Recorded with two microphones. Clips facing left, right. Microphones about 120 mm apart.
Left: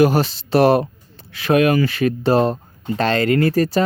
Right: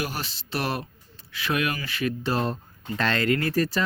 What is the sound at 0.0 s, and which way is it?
Speech, 90° left.